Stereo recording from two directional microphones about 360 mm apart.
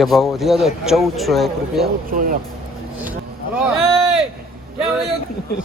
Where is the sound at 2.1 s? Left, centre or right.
Right.